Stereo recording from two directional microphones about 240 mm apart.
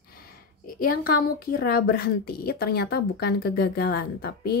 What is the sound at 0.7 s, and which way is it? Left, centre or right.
A woman's voice, left.